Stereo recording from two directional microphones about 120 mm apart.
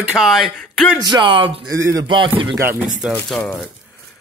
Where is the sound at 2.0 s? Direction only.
45° right (ahead or behind).